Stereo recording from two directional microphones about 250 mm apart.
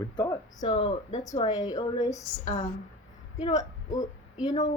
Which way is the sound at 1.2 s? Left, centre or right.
Centre.